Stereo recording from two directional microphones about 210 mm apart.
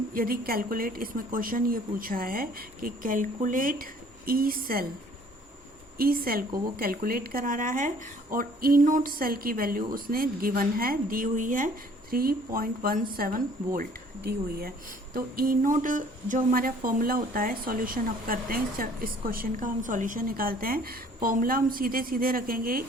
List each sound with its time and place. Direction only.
0.1 s a woman's voice: 45° right (ahead or behind)
6.0 s a woman's voice: 45° right (ahead or behind)